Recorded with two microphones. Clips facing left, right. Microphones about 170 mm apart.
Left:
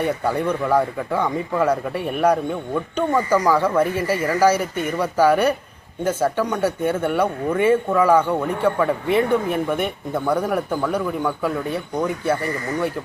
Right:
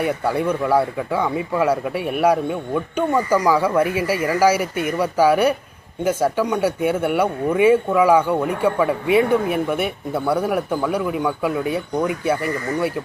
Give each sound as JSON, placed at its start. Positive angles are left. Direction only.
{"t": 0.0, "sound": "speech", "side_deg": -10}